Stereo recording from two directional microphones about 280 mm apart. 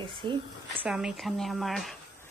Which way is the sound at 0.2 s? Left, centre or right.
Centre.